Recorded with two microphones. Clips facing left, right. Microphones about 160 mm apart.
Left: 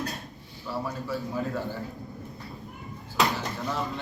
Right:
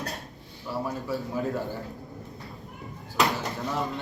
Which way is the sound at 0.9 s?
20° right (ahead or behind).